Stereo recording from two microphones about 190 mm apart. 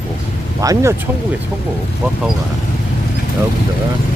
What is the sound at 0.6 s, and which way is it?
Speech, 20° right (ahead or behind).